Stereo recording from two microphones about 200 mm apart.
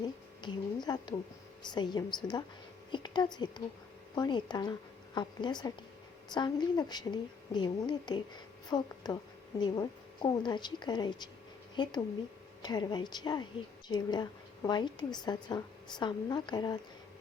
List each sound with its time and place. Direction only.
0.0 s a woman's voice: 20° left (ahead or behind)